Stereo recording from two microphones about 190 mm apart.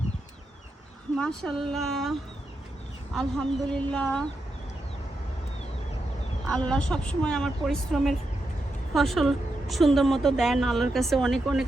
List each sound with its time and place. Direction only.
1.1 s a woman's voice: 5° left (ahead or behind)
6.5 s a woman's voice: 5° left (ahead or behind)